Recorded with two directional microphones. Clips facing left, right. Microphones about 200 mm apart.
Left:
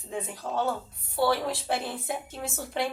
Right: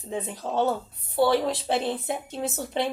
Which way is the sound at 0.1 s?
20° right (ahead or behind).